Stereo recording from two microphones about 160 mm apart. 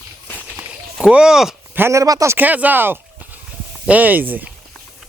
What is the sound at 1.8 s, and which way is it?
Speech, 20° right (ahead or behind).